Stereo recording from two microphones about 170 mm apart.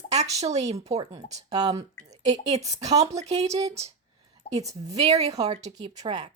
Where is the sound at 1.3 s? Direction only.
20° right (ahead or behind).